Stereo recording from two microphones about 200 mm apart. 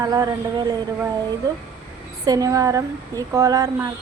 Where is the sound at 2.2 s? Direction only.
20° right (ahead or behind).